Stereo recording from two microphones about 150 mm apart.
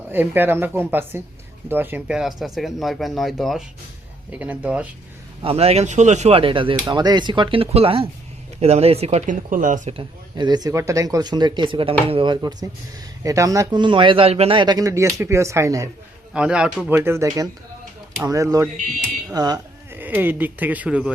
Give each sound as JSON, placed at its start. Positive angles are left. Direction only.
{"t": 0.1, "sound": "speech", "side_deg": -15}
{"t": 5.4, "sound": "speech", "side_deg": -40}
{"t": 9.9, "sound": "speech", "side_deg": -30}
{"t": 16.3, "sound": "speech", "side_deg": -5}
{"t": 17.0, "sound": "speech", "side_deg": -15}
{"t": 19.9, "sound": "speech", "side_deg": -10}